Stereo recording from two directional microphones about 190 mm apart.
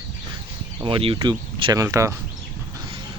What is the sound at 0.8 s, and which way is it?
Speech, 30° right (ahead or behind).